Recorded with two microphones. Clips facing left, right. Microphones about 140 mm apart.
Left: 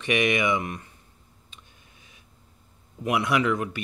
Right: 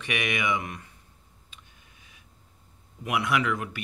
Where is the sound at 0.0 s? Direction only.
30° left (ahead or behind).